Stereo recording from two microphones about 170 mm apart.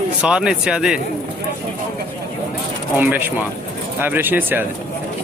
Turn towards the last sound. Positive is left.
turn(degrees=-10)  # may be behind; listen again after turning